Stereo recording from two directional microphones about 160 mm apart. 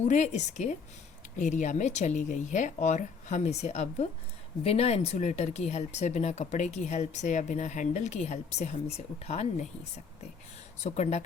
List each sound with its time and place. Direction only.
0.0 s speech: 45° left (ahead or behind)
10.8 s speech: 45° left (ahead or behind)